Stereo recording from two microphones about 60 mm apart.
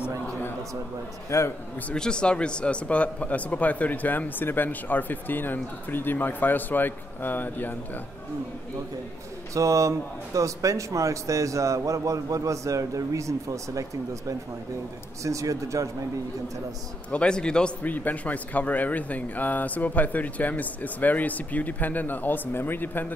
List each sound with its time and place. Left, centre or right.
1.3 s a man's voice: left
2.0 s speech: centre; by 7.7 s left
9.5 s a man's voice: right
17.1 s speech: centre
17.8 s speech: left